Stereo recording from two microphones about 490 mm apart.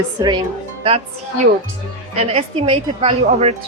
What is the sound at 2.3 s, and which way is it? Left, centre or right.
A woman's voice, centre.